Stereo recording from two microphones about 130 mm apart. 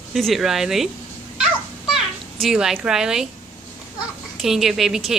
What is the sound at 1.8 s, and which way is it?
Cat, centre (ahead or behind).